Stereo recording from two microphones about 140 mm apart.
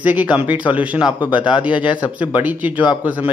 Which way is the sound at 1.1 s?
35° left (ahead or behind).